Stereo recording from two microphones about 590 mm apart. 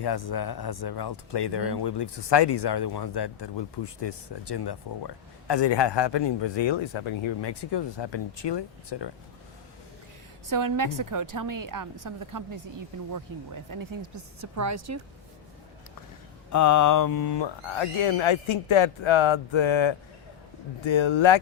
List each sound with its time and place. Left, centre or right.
0.0 s speech: left
10.4 s a woman's voice: right
16.5 s speech: left